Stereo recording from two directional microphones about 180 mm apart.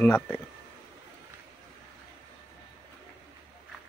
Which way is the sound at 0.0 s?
10° left (ahead or behind).